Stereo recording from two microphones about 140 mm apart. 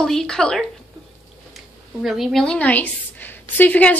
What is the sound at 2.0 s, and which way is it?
A woman's voice, centre (ahead or behind).